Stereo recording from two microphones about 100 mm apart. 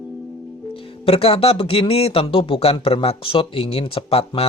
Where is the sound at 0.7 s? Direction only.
75° left (ahead or behind).